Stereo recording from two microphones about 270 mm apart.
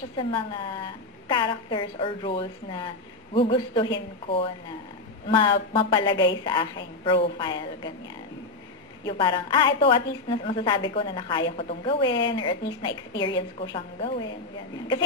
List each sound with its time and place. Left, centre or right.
0.2 s a woman's voice: centre
9.0 s a woman's voice: centre